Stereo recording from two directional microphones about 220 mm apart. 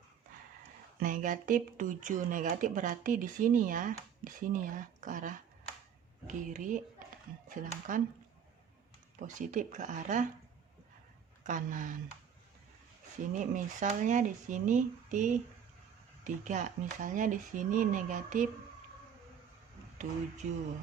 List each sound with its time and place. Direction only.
0.9 s speech: 35° right (ahead or behind)
9.1 s speech: 35° right (ahead or behind)
11.4 s speech: 35° right (ahead or behind)
13.3 s speech: 35° right (ahead or behind)
20.4 s speech: 35° right (ahead or behind)